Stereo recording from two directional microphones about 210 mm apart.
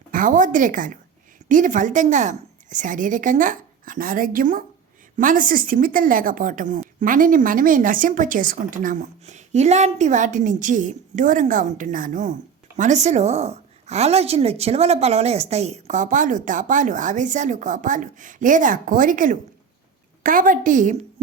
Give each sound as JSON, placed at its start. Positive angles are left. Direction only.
{"t": 0.1, "sound": "a woman's voice", "side_deg": -40}